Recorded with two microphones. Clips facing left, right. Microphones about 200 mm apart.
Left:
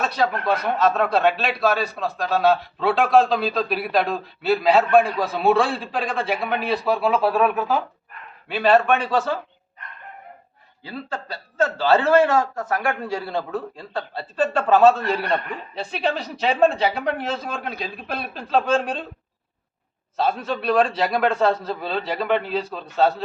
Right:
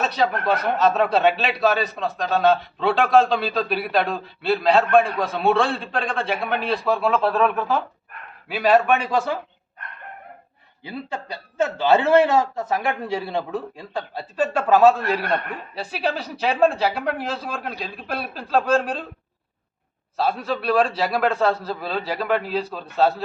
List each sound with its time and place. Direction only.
0.0 s speech: centre (ahead or behind)
8.4 s a man's voice: 5° right (ahead or behind)
10.8 s a man's voice: 15° right (ahead or behind)
20.1 s speech: 5° right (ahead or behind)